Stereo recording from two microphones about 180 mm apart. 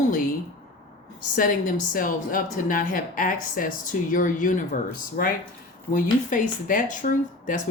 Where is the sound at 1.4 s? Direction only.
50° left (ahead or behind).